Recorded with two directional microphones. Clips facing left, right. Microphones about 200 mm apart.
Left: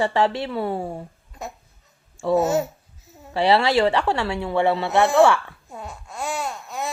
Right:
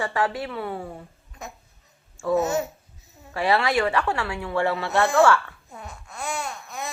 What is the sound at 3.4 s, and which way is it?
Speech, 25° left (ahead or behind).